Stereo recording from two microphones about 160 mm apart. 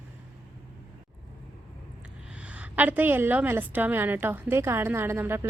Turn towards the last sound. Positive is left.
turn(degrees=-15)  # may be behind; listen again after turning